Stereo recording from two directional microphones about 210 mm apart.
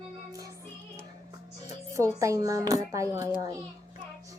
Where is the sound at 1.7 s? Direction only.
15° right (ahead or behind).